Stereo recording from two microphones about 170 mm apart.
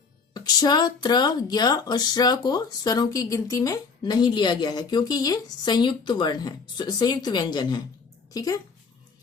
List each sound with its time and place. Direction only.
0.3 s speech: 25° left (ahead or behind)